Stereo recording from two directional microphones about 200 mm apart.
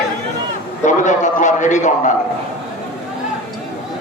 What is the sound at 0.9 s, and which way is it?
A man's voice, 40° left (ahead or behind).